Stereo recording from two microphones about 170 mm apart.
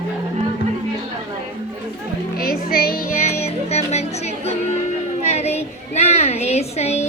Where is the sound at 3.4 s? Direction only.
40° left (ahead or behind).